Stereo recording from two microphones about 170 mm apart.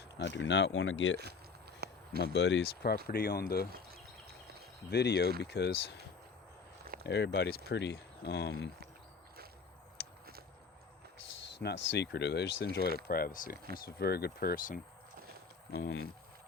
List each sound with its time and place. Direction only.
0.2 s speech: 90° left
1.8 s a sound: 70° right (ahead or behind)
2.2 s speech: 90° left
3.1 s speech: 65° left (ahead or behind)
4.9 s speech: 75° left (ahead or behind)
7.0 s speech: 75° left (ahead or behind)
10.0 s a sound: 65° left (ahead or behind)
11.6 s speech: 85° left
13.1 s speech: 60° left (ahead or behind)
15.7 s speech: 65° left (ahead or behind)